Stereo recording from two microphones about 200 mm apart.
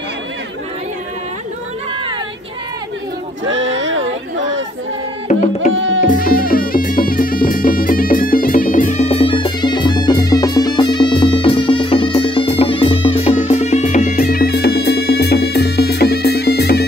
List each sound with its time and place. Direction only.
3.4 s a sound: 65° right (ahead or behind)
5.3 s music: 35° left (ahead or behind)
5.7 s music: 75° right (ahead or behind)
6.0 s music: 45° left (ahead or behind)